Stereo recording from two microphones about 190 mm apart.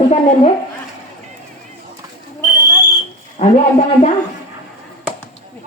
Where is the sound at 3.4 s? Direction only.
35° left (ahead or behind).